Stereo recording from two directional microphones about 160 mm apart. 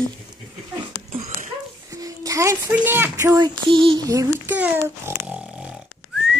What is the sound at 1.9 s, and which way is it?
Speech, 20° right (ahead or behind).